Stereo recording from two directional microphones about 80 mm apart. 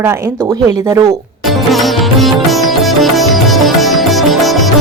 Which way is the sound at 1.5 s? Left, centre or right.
Centre.